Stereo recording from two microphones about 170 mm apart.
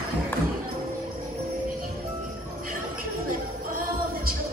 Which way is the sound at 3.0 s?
55° right (ahead or behind).